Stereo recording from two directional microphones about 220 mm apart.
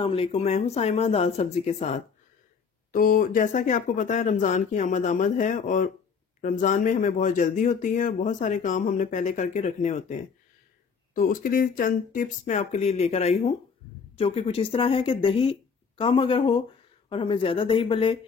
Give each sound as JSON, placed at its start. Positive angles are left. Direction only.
{"t": 0.0, "sound": "speech", "side_deg": 25}
{"t": 11.1, "sound": "speech", "side_deg": 40}